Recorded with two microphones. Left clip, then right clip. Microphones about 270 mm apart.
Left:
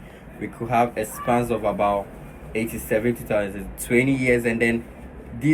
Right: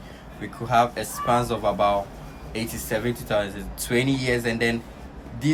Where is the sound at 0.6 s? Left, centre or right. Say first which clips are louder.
Even; centre.